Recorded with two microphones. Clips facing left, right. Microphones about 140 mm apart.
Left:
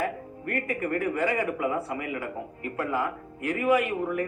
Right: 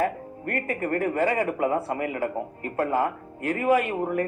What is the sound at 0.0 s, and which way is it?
Speech, 45° right (ahead or behind).